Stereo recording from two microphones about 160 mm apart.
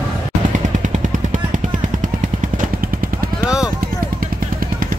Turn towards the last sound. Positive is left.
turn(degrees=-5)  # may be behind; listen again after turning